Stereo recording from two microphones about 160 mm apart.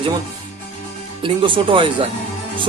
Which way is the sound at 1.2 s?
30° right (ahead or behind).